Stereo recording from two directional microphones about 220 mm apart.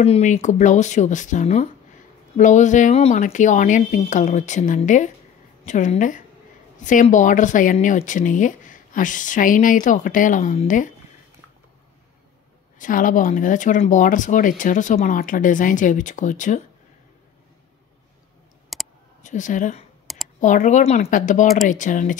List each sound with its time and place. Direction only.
0.0 s speech: 30° left (ahead or behind)
12.7 s speech: 35° left (ahead or behind)
18.7 s clicking: centre (ahead or behind)
19.2 s a woman's voice: 35° left (ahead or behind)